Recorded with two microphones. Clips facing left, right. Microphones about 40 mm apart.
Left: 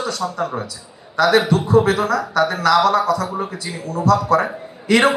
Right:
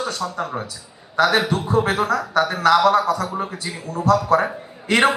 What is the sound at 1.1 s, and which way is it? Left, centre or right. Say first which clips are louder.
A man's voice: left 3 dB; right.